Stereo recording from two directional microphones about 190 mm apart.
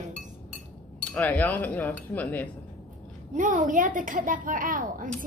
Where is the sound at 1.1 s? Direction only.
10° left (ahead or behind).